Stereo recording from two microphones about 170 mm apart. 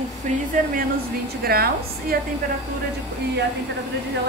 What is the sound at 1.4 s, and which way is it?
Speech, 65° right (ahead or behind).